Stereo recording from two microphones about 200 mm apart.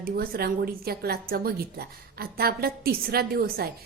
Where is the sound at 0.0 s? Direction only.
50° right (ahead or behind).